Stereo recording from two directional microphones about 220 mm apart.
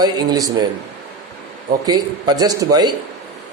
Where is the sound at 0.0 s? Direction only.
15° right (ahead or behind).